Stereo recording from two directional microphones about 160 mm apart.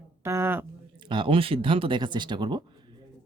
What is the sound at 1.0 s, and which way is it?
Speech, 30° right (ahead or behind).